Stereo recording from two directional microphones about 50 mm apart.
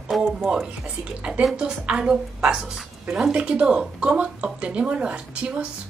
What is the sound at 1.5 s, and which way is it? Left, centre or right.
A woman's voice, centre.